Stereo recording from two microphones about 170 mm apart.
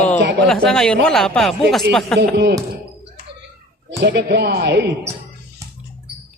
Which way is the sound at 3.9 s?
80° right.